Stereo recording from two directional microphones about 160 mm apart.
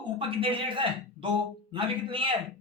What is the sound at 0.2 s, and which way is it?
A man's voice, 35° right (ahead or behind).